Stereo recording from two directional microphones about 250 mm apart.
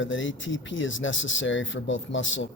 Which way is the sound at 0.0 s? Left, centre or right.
Left.